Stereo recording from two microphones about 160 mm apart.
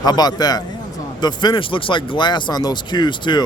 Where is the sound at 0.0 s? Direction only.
25° left (ahead or behind).